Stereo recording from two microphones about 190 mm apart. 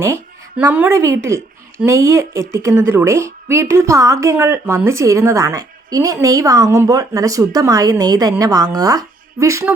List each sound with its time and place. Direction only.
0.6 s speech: 10° right (ahead or behind)